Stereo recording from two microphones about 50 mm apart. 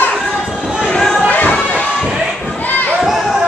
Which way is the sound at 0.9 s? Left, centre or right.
Centre.